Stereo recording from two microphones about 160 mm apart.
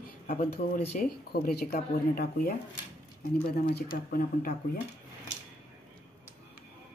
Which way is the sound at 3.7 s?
60° left (ahead or behind).